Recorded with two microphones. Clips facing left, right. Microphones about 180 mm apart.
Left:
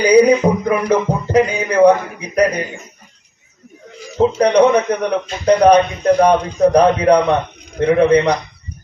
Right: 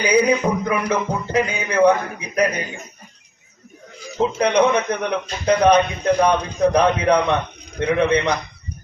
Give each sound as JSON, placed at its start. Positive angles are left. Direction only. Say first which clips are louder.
{"t": 0.0, "sound": "a man's voice", "louder": "left 7 dB", "side_deg": 35}
{"t": 4.4, "sound": "a man's voice", "louder": "left 5 dB", "side_deg": 35}